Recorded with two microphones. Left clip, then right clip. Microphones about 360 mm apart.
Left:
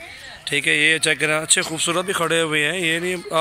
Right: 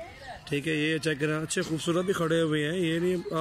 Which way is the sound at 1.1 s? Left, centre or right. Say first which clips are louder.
Left 9 dB; left.